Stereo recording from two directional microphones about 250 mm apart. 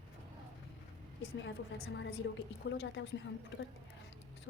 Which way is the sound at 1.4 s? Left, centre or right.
Left.